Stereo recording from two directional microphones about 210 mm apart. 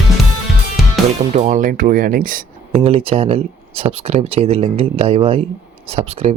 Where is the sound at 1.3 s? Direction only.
35° right (ahead or behind).